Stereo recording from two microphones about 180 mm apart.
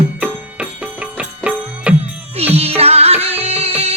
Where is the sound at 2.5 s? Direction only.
35° right (ahead or behind).